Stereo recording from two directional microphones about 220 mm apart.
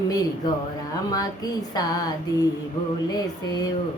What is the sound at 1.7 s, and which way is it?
Hands, 15° left (ahead or behind).